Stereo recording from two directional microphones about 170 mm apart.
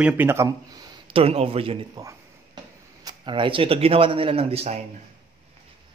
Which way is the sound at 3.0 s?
30° right (ahead or behind).